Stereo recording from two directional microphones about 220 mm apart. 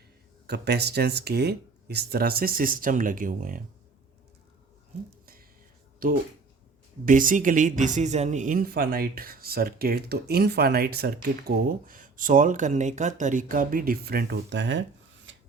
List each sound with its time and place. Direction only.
0.4 s speech: 50° right (ahead or behind)
5.2 s music: 40° right (ahead or behind)
7.0 s speech: 35° right (ahead or behind); by 14.8 s 55° right (ahead or behind)
15.3 s filing: 55° right (ahead or behind)